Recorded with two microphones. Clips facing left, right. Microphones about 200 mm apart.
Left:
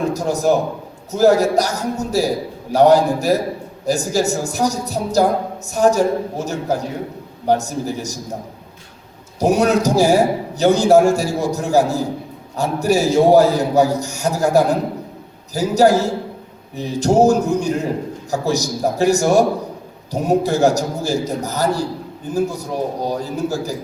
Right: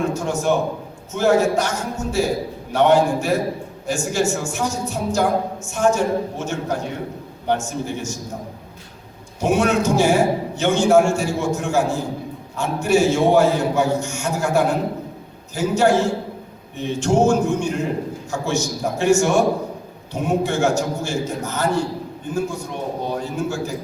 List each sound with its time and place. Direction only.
0.1 s a man's voice: 35° left (ahead or behind)
9.4 s a man's voice: 40° left (ahead or behind)